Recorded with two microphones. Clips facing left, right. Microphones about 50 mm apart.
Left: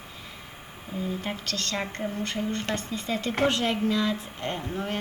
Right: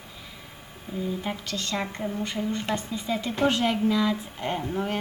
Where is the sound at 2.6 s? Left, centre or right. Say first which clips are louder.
Right 1 dB; centre.